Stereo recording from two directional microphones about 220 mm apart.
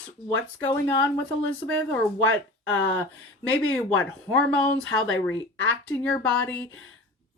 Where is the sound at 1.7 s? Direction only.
5° left (ahead or behind).